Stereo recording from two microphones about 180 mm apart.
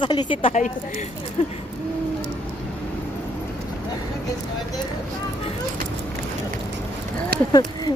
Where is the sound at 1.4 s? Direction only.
35° left (ahead or behind).